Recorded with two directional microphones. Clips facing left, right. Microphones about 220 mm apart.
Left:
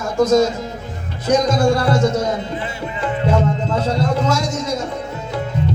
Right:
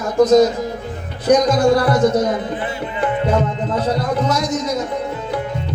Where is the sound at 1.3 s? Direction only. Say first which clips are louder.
Right 2 dB; 25° left (ahead or behind).